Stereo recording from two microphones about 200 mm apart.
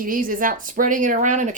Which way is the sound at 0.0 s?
45° right (ahead or behind).